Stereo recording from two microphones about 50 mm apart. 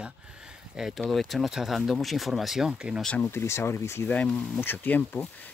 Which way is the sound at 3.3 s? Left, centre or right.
Left.